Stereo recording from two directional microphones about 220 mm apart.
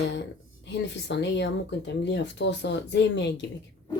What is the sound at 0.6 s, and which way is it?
Speech, 50° left (ahead or behind).